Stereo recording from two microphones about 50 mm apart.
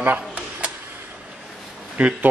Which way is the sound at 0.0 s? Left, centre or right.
Right.